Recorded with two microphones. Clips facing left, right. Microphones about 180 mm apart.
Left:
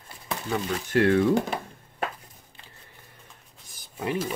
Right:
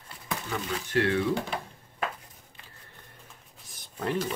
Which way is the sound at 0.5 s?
45° left (ahead or behind).